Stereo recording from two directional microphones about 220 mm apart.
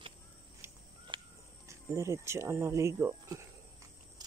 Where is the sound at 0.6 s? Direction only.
10° right (ahead or behind).